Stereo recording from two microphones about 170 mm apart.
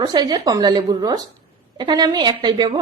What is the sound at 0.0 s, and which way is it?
A woman's voice, 25° right (ahead or behind).